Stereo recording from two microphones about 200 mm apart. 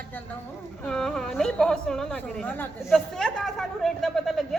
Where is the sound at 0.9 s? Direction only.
5° left (ahead or behind).